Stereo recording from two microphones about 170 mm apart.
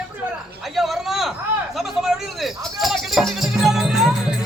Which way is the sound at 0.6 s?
Centre (ahead or behind).